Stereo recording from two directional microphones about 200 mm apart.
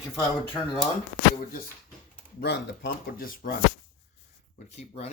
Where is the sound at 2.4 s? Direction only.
60° left (ahead or behind).